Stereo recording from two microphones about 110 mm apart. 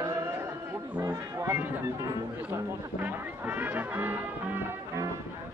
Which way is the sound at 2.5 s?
15° right (ahead or behind).